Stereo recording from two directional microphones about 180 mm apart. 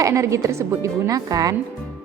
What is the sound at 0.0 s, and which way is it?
Speech, 15° right (ahead or behind).